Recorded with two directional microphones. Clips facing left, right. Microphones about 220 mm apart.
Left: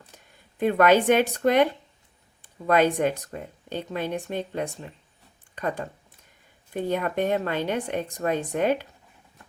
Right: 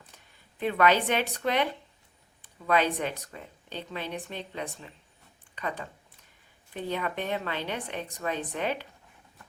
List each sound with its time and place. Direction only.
0.6 s speech: 45° left (ahead or behind)